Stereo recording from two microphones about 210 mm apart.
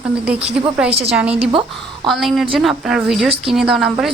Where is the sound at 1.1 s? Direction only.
5° right (ahead or behind).